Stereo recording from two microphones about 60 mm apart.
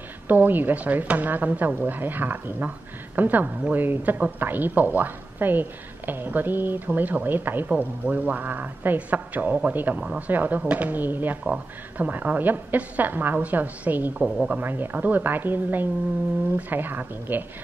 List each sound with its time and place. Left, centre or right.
0.3 s a woman's voice: right